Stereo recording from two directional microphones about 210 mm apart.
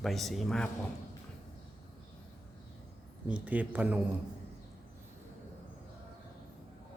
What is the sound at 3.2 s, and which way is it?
Speech, 5° right (ahead or behind).